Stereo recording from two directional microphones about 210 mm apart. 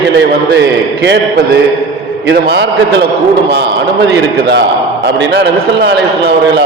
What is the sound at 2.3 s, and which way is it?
A man's voice, 55° right (ahead or behind).